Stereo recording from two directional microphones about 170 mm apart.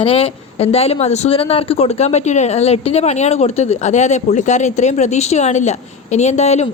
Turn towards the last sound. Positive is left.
turn(degrees=40)  # may be behind; listen again after turning